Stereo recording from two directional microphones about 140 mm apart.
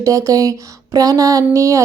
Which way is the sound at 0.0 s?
25° right (ahead or behind).